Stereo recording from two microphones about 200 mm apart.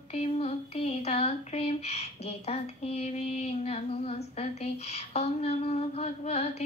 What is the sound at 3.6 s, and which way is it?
Humming, 30° left (ahead or behind).